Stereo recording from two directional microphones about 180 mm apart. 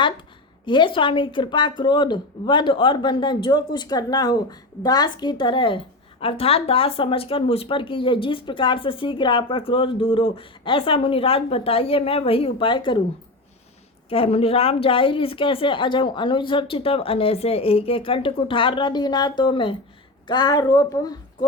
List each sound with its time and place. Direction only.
0.6 s speech: 25° left (ahead or behind)
14.1 s speech: 30° left (ahead or behind)